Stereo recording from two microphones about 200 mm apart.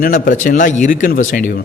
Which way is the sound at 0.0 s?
40° left (ahead or behind).